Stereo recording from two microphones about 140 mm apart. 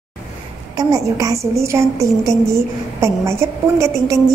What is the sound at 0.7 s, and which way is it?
A woman's voice, 25° right (ahead or behind).